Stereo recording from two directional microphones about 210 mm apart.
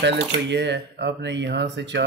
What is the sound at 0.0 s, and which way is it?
Speech, 55° right (ahead or behind).